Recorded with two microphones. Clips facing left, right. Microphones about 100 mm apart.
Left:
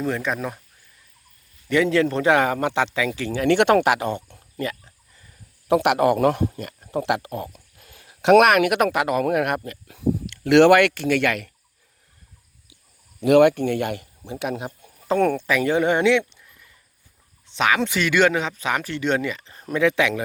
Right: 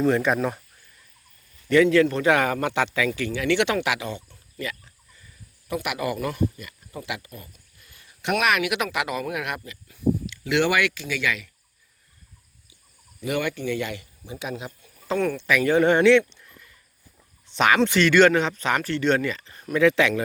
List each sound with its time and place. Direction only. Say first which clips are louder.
0.0 s speech: right 4 dB; centre (ahead or behind)
1.7 s a man's voice: right 2 dB; 25° left (ahead or behind)
3.3 s speech: left 7 dB; 45° left (ahead or behind)
5.6 s a man's voice: left 10 dB; 80° left
8.4 s speech: left 6 dB; 50° left (ahead or behind)
9.8 s speech: right 4 dB; 70° left (ahead or behind)
13.2 s speech: left 11 dB; 75° left (ahead or behind); by 15.4 s 50° left (ahead or behind)
15.4 s a man's voice: left 1 dB; 30° left (ahead or behind)
15.7 s speech: right 3 dB; 15° left (ahead or behind)
17.4 s a sound: right 1 dB; centre (ahead or behind)
17.7 s speech: right 5 dB; 10° left (ahead or behind)